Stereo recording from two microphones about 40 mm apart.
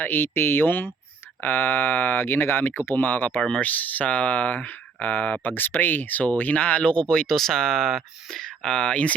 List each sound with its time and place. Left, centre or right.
0.0 s speech: left
3.0 s speech: left
5.4 s speech: left
6.8 s speech: left
8.4 s speech: left